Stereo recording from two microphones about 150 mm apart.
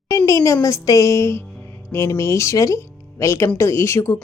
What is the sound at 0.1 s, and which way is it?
A woman's voice, 20° left (ahead or behind).